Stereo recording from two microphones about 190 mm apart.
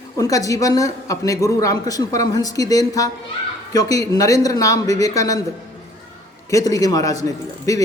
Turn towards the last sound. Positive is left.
turn(degrees=15)  # may be behind; listen again after turning